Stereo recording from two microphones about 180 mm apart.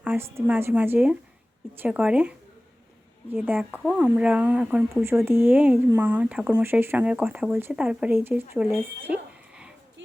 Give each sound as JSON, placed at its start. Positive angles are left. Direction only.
{"t": 0.0, "sound": "speech", "side_deg": -10}
{"t": 3.3, "sound": "speech", "side_deg": -10}